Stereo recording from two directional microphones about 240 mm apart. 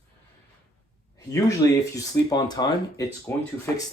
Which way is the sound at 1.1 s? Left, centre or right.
Centre.